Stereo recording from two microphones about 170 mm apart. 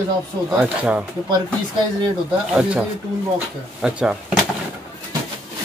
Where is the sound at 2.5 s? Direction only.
5° right (ahead or behind).